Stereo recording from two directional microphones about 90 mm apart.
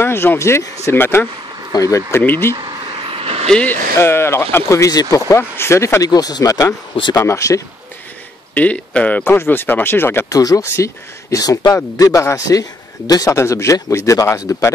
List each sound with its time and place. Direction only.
0.0 s speech: 25° left (ahead or behind)
1.7 s a man's voice: 40° left (ahead or behind)
2.5 s a sound: 60° right (ahead or behind); by 3.3 s 85° right
3.4 s speech: 10° left (ahead or behind)
3.9 s speech: 25° left (ahead or behind)
4.6 s a man's voice: 35° left (ahead or behind)
8.5 s speech: 15° left (ahead or behind)
10.3 s a man's voice: 35° left (ahead or behind)
13.4 s a man's voice: 35° left (ahead or behind)